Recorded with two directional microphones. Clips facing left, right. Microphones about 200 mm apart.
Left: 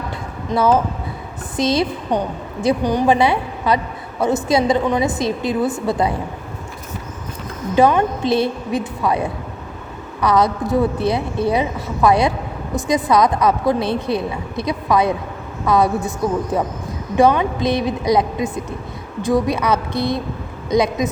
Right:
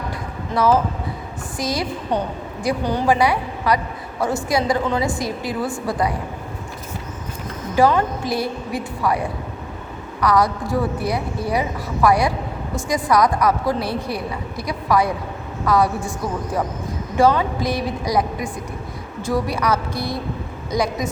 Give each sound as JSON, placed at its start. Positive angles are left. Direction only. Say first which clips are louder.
{"t": 0.5, "sound": "a woman's voice", "louder": "left 2 dB", "side_deg": 15}
{"t": 7.8, "sound": "a woman's voice", "louder": "left 2 dB", "side_deg": 20}